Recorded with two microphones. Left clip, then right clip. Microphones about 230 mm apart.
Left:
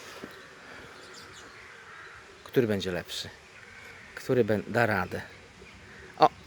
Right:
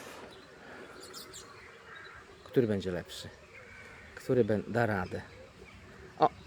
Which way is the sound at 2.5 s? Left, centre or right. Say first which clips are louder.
Left 3 dB; centre.